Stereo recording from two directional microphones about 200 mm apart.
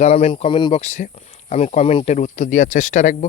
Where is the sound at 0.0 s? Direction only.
30° left (ahead or behind).